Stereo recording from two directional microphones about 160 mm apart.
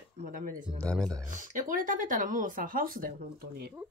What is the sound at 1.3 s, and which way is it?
Speech, 55° right (ahead or behind).